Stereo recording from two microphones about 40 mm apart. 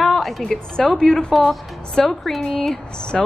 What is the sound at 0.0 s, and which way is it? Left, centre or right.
A woman's voice, centre.